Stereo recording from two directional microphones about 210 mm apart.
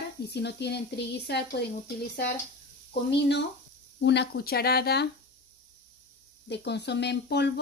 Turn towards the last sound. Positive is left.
turn(degrees=55)  # may be behind; listen again after turning